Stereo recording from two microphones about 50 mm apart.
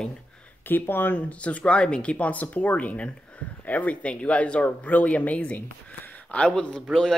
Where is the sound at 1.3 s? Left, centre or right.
Left.